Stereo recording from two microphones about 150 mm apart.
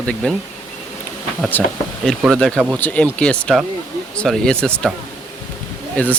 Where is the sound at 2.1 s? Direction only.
Centre (ahead or behind).